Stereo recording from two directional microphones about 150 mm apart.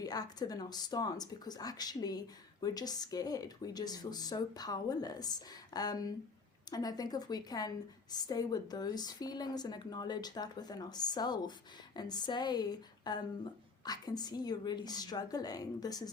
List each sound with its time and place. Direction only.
0.0 s speech: 25° left (ahead or behind)